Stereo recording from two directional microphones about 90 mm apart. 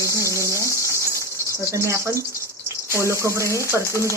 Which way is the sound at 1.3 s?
30° right (ahead or behind).